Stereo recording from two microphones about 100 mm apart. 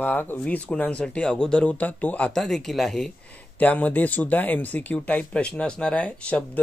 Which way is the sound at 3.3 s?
15° left (ahead or behind).